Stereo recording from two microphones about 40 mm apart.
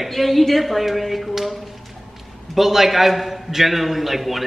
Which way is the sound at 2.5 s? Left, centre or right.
Centre.